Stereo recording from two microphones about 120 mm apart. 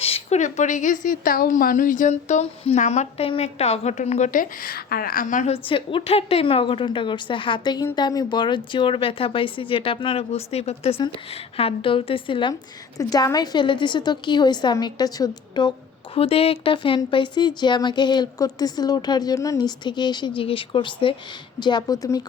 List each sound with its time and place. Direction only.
0.0 s speech: 60° left (ahead or behind)
3.2 s a woman's voice: 55° left (ahead or behind); by 5.5 s 90° left
5.6 s speech: 45° left (ahead or behind)
13.0 s speech: 30° left (ahead or behind)
16.1 s speech: 55° left (ahead or behind); by 22.2 s 30° left (ahead or behind)